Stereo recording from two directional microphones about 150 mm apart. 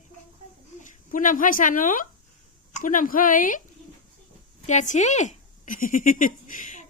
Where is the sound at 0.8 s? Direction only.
60° left (ahead or behind).